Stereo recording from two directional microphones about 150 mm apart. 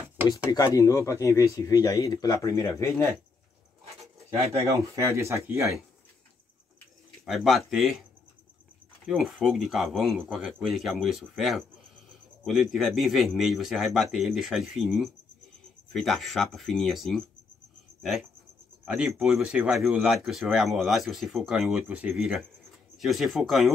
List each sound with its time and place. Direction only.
0.7 s speech: 20° left (ahead or behind)
4.9 s speech: 20° right (ahead or behind)
7.2 s speech: centre (ahead or behind)
9.0 s speech: centre (ahead or behind)
18.9 s speech: 5° right (ahead or behind)